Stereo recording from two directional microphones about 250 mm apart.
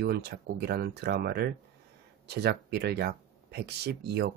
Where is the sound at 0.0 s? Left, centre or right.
Right.